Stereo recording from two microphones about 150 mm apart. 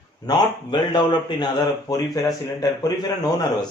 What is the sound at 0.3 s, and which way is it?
A man's voice, 30° left (ahead or behind).